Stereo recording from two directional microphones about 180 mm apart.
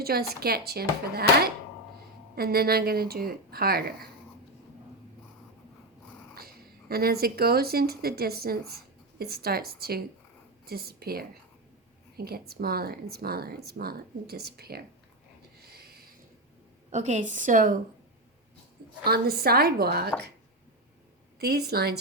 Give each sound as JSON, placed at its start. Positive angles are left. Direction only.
{"t": 0.0, "sound": "speech", "side_deg": -60}
{"t": 6.3, "sound": "speech", "side_deg": -60}
{"t": 15.6, "sound": "a sound", "side_deg": -60}
{"t": 16.9, "sound": "a woman's voice", "side_deg": -40}
{"t": 19.0, "sound": "speech", "side_deg": -60}
{"t": 21.4, "sound": "speech", "side_deg": -60}